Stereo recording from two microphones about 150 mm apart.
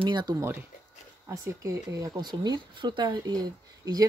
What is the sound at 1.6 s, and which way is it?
Speech, 25° right (ahead or behind).